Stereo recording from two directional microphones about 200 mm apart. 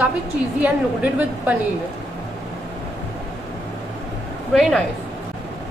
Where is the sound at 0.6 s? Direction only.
5° right (ahead or behind).